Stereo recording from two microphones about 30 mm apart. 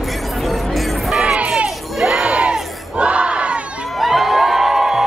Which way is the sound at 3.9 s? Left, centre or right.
Centre.